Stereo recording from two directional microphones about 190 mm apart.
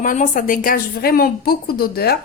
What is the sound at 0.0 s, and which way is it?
A woman's voice, 45° left (ahead or behind).